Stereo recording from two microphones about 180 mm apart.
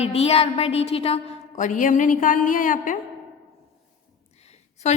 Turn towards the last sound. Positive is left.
turn(degrees=35)  # may be behind; listen again after turning